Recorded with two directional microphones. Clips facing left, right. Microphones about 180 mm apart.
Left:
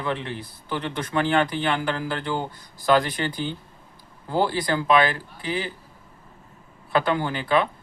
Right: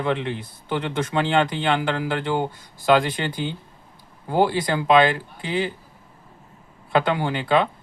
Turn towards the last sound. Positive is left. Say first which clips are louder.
# right 2 dB
turn(degrees=-20)  # may be behind; listen again after turning